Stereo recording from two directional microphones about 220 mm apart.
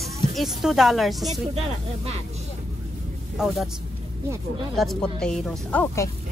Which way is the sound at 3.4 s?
5° right (ahead or behind).